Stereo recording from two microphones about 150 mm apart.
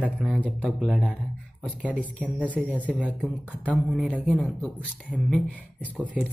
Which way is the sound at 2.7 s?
10° right (ahead or behind).